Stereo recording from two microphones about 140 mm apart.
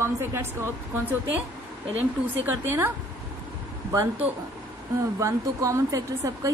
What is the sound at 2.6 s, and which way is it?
Speech, 15° right (ahead or behind).